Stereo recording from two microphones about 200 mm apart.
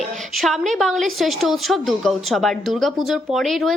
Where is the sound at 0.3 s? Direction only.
Centre (ahead or behind).